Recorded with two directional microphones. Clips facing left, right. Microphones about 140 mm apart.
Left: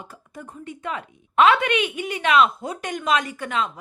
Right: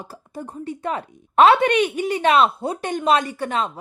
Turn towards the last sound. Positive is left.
turn(degrees=-35)  # may be behind; listen again after turning